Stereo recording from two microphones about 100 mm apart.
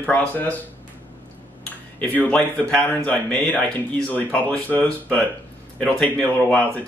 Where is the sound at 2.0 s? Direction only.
15° left (ahead or behind).